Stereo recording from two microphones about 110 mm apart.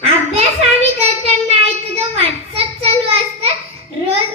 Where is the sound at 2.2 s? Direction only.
65° right (ahead or behind).